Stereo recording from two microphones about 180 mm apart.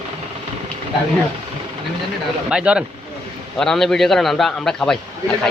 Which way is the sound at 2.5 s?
5° right (ahead or behind).